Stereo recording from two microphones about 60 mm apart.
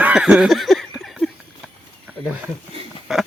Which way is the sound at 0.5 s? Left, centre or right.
Centre.